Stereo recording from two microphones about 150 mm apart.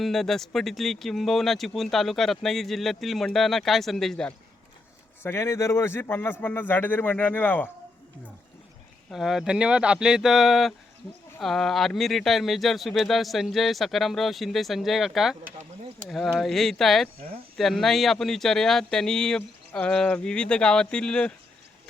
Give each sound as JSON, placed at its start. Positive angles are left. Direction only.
{"t": 0.0, "sound": "speech", "side_deg": 0}
{"t": 5.2, "sound": "speech", "side_deg": 15}
{"t": 9.0, "sound": "speech", "side_deg": 0}